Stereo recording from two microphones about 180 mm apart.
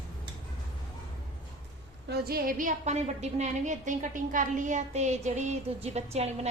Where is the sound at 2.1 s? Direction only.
60° right (ahead or behind); by 6.5 s 35° right (ahead or behind).